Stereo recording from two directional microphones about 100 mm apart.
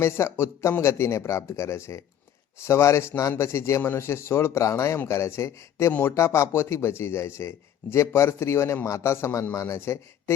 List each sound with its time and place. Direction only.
0.0 s a man's voice: 25° left (ahead or behind)